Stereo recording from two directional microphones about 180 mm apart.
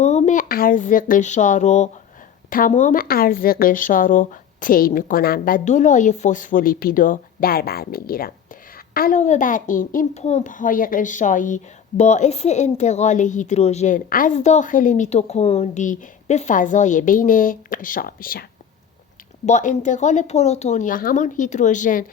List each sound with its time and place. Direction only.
0.0 s a child's voice: 40° left (ahead or behind); by 18.4 s 55° left (ahead or behind)
19.5 s a child's voice: 40° left (ahead or behind)